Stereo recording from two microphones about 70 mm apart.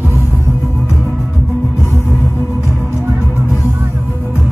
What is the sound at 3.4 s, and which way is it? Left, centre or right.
Music, left.